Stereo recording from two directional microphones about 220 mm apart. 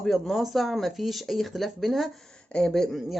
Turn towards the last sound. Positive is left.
turn(degrees=0)  # may be behind; listen again after turning